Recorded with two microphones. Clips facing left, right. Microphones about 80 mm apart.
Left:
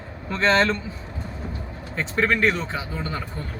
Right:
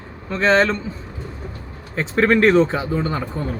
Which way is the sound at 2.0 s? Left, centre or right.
Centre.